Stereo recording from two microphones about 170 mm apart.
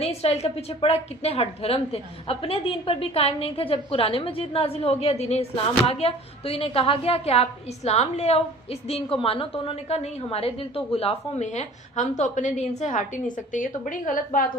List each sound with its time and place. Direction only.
0.0 s a woman's voice: 35° left (ahead or behind); by 14.4 s 50° left (ahead or behind)